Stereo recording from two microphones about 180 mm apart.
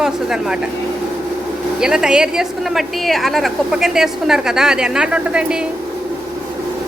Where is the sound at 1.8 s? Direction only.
5° right (ahead or behind).